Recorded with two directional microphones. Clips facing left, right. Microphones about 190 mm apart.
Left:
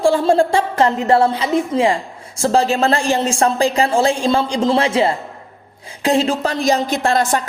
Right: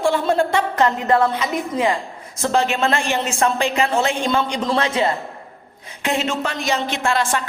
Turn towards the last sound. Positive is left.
turn(degrees=40)  # may be behind; listen again after turning